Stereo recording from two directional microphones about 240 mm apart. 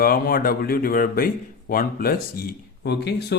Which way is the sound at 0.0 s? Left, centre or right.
Left.